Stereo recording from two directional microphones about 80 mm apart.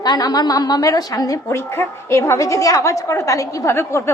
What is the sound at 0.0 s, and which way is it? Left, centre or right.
A woman's voice, left.